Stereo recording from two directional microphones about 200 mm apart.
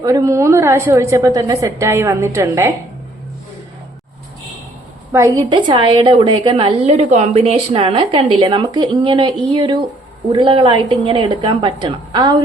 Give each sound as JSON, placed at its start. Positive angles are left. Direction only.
{"t": 0.0, "sound": "a woman's voice", "side_deg": -15}
{"t": 5.1, "sound": "a woman's voice", "side_deg": -15}